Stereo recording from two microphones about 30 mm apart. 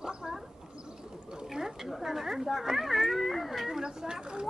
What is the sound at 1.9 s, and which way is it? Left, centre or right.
Speech, centre.